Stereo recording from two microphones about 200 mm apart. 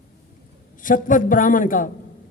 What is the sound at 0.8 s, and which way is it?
Speech, 40° left (ahead or behind).